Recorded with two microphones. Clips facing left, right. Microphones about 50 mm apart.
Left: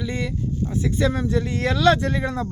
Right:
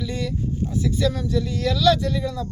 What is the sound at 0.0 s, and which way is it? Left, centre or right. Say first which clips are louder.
Speech: even; left.